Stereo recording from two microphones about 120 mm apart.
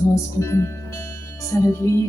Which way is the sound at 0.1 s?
25° left (ahead or behind).